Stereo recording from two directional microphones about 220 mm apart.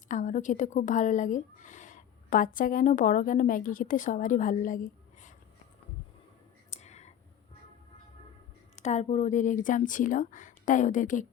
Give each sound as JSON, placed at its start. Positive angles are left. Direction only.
{"t": 0.1, "sound": "speech", "side_deg": 35}
{"t": 6.7, "sound": "clicking", "side_deg": 30}
{"t": 8.8, "sound": "speech", "side_deg": 30}